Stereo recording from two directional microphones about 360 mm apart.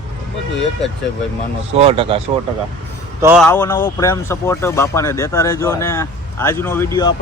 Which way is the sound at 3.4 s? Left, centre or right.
Centre.